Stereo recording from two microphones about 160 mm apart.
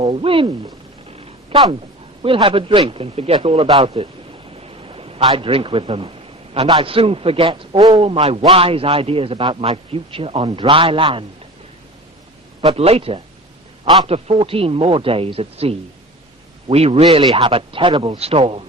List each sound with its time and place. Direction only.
0.0 s a man's voice: 35° right (ahead or behind)
1.2 s a sound: 35° right (ahead or behind)
2.2 s a man's voice: 35° right (ahead or behind)
12.6 s a man's voice: 40° right (ahead or behind)
14.1 s a man's voice: 35° right (ahead or behind)